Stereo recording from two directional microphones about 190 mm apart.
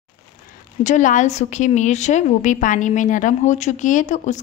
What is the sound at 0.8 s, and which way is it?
A woman's voice, 40° left (ahead or behind).